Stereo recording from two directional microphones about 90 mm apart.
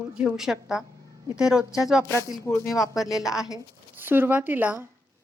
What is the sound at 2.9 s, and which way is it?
Speech, 5° right (ahead or behind).